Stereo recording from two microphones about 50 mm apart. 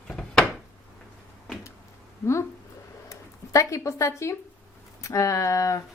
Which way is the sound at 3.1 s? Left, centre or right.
Left.